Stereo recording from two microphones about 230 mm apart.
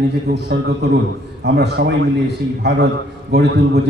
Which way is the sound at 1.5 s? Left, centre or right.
Right.